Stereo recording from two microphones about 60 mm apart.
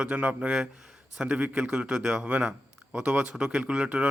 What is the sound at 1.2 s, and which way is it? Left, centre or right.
A man's voice, right.